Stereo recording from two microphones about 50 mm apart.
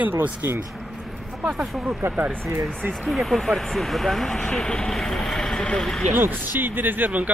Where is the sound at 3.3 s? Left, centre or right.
Centre.